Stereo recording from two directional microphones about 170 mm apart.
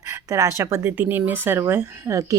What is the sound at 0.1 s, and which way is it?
Speech, 20° right (ahead or behind).